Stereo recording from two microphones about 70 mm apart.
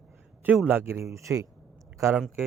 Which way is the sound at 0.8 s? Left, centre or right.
Right.